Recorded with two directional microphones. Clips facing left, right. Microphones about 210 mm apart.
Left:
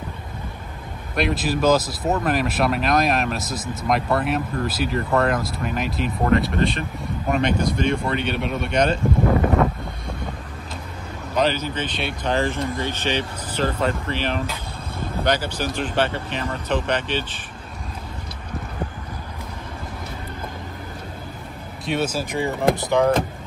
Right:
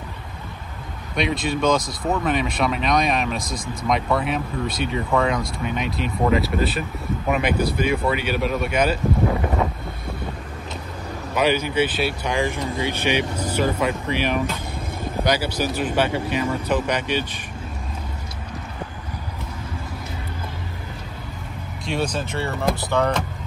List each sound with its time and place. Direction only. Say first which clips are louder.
1.1 s speech: left 1 dB; 5° left (ahead or behind)
11.3 s speech: right 2 dB; 10° right (ahead or behind)
21.8 s speech: left 1 dB; centre (ahead or behind)
22.3 s speech: left 3 dB; 15° left (ahead or behind)